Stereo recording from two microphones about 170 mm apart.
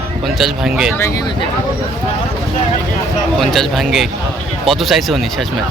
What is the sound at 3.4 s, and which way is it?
Speech, centre (ahead or behind).